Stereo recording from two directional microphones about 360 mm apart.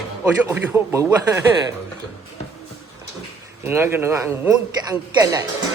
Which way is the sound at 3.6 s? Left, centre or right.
Centre.